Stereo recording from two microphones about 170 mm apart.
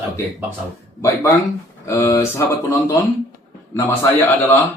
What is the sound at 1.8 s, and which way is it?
Speech, 15° left (ahead or behind).